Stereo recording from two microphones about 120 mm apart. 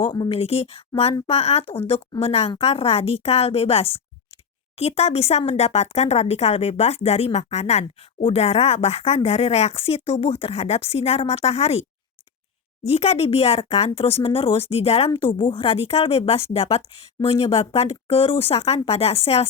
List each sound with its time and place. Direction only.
0.0 s speech: 45° left (ahead or behind)
12.8 s speech: 60° left (ahead or behind)
15.1 s speech: 45° left (ahead or behind)